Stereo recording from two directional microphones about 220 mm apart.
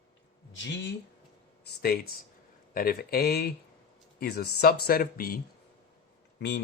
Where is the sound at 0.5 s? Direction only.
50° left (ahead or behind).